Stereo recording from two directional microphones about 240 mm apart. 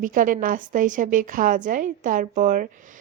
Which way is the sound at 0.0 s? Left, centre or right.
Right.